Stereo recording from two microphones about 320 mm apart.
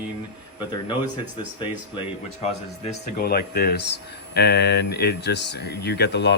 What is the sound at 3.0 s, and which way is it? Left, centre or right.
Speech, left.